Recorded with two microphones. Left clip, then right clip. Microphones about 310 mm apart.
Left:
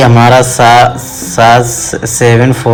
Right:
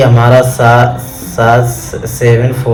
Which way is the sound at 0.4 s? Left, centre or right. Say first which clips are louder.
Left 3 dB; left.